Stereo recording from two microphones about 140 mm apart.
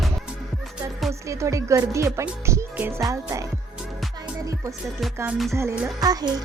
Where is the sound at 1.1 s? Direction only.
20° right (ahead or behind).